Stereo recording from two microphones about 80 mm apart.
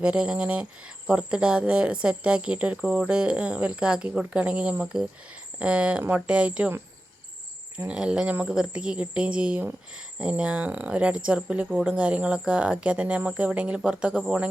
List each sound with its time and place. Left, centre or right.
0.0 s speech: centre
7.9 s speech: centre